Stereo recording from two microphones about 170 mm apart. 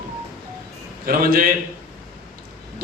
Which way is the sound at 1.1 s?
60° right (ahead or behind).